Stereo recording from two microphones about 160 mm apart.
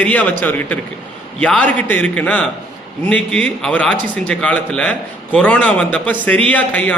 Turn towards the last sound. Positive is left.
turn(degrees=10)  # may be behind; listen again after turning